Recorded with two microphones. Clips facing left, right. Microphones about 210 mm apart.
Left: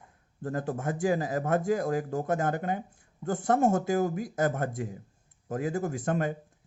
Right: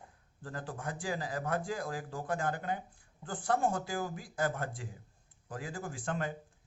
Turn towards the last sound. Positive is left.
turn(degrees=45)  # may be behind; listen again after turning